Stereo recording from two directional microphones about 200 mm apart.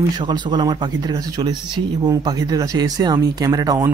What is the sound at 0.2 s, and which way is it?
Speech, 20° right (ahead or behind).